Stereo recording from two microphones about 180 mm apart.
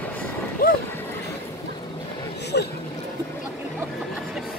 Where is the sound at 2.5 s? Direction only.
60° left (ahead or behind).